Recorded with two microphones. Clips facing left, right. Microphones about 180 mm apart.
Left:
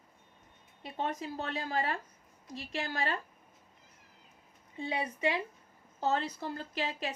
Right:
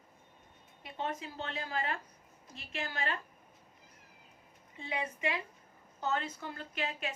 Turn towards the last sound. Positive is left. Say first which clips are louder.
# left 2 dB
turn(degrees=35)  # may be behind; listen again after turning